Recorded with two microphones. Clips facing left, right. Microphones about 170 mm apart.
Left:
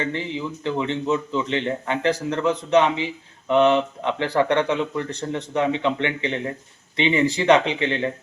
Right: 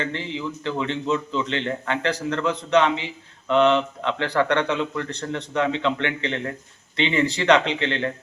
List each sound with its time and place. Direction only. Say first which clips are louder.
0.0 s speech: left 2 dB; 15° left (ahead or behind)